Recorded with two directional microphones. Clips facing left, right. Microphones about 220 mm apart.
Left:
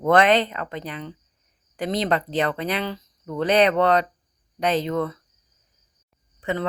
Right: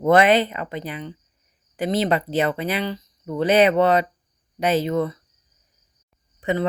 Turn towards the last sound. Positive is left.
turn(degrees=-15)  # may be behind; listen again after turning